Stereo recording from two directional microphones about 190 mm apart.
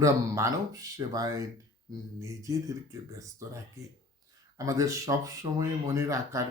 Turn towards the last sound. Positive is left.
turn(degrees=-15)  # may be behind; listen again after turning